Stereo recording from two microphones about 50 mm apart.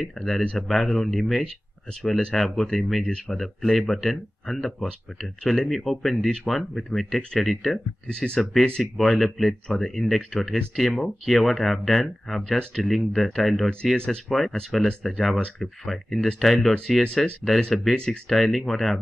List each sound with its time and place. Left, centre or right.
0.0 s speech: centre
13.9 s speech: centre
14.3 s speech: centre
18.3 s speech: centre